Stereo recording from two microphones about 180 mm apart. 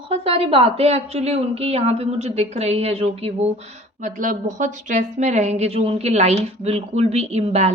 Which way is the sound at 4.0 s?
45° right (ahead or behind).